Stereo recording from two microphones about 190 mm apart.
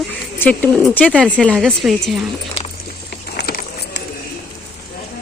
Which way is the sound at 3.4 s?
55° left (ahead or behind).